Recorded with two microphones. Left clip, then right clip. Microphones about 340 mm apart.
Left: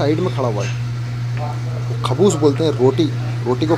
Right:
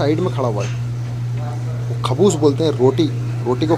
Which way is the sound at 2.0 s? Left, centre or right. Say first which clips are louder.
Even; centre.